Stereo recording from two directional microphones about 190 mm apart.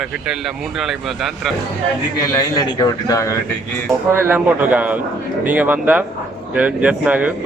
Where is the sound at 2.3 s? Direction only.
20° left (ahead or behind).